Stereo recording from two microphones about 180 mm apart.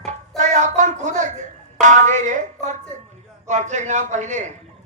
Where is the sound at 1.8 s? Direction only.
45° right (ahead or behind).